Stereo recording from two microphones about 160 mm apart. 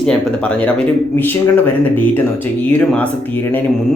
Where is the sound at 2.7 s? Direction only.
10° left (ahead or behind).